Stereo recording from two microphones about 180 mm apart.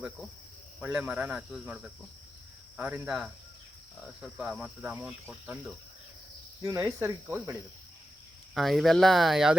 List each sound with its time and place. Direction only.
0.8 s speech: 10° right (ahead or behind)
8.5 s speech: centre (ahead or behind)